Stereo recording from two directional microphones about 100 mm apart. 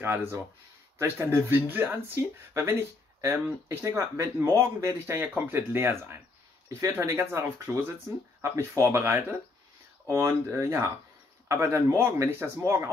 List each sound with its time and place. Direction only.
0.0 s speech: 25° right (ahead or behind)